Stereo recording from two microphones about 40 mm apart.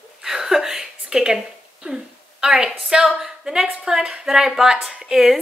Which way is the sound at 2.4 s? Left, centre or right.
Centre.